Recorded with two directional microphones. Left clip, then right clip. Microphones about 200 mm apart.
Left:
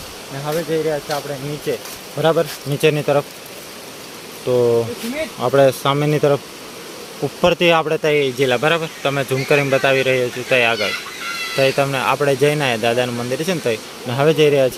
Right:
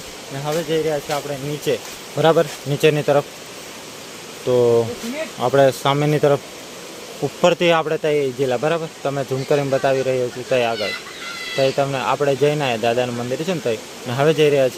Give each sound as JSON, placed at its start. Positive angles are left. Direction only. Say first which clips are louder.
{"t": 0.4, "sound": "speech", "louder": "left 1 dB", "side_deg": -10}
{"t": 1.7, "sound": "speech", "louder": "right 2 dB", "side_deg": -40}
{"t": 2.1, "sound": "speech", "louder": "right 1 dB", "side_deg": -15}
{"t": 2.8, "sound": "speech", "louder": "even", "side_deg": 0}
{"t": 4.4, "sound": "speech", "louder": "even", "side_deg": -5}
{"t": 7.4, "sound": "speech", "louder": "left 1 dB", "side_deg": 0}